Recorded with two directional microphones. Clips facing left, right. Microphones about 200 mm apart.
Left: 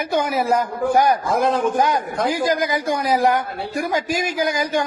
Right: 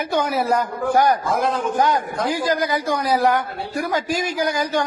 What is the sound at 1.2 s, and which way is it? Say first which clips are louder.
Speech: left 2 dB; 55° left (ahead or behind).